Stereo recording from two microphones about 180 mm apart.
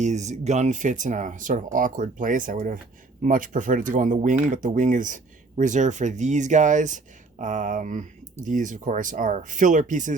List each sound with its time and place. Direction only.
0.0 s speech: 40° right (ahead or behind)